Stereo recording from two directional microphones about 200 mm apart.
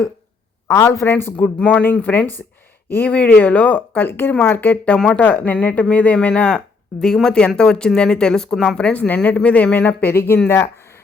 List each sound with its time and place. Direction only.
0.7 s speech: 15° left (ahead or behind)